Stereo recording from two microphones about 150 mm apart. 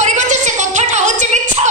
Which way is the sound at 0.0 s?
50° right (ahead or behind).